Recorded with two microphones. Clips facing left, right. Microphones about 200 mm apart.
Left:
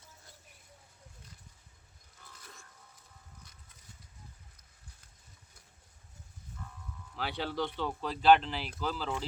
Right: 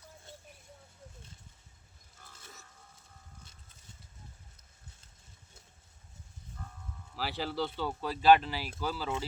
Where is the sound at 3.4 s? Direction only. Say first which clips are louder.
Right 1 dB; 25° right (ahead or behind).